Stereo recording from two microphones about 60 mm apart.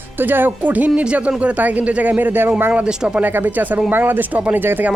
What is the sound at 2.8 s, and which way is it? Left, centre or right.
Speech, centre.